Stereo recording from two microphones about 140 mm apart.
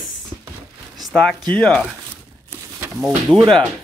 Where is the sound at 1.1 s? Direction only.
5° left (ahead or behind).